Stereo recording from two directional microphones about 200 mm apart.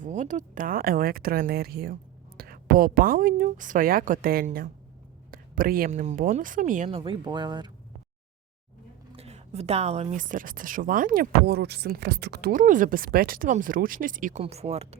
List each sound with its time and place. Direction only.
0.0 s speech: 40° right (ahead or behind); by 7.7 s 20° right (ahead or behind)
9.1 s speech: 30° right (ahead or behind)